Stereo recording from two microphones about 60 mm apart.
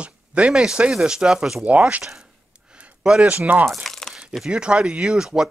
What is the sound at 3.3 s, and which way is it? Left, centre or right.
Speech, right.